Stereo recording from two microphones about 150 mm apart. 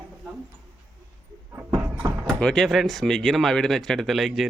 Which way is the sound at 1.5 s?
15° right (ahead or behind).